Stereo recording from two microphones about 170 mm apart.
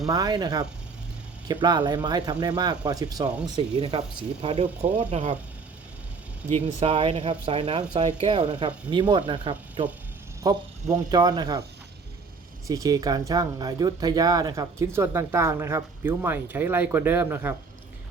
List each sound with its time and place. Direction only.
0.1 s speech: 25° right (ahead or behind)
1.6 s speech: 25° right (ahead or behind)
4.4 s speech: 35° right (ahead or behind)
6.7 s speech: 35° right (ahead or behind)
8.3 s speech: 25° right (ahead or behind)
12.6 s speech: 20° right (ahead or behind)